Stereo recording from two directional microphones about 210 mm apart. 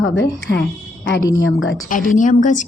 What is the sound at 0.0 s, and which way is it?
A woman's voice, 60° left (ahead or behind).